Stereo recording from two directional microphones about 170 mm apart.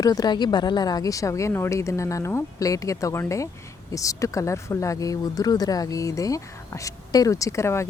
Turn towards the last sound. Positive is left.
turn(degrees=15)  # may be behind; listen again after turning